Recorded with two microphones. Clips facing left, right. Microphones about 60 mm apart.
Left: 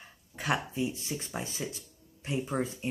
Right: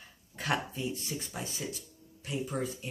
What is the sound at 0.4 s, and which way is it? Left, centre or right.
Dog, centre.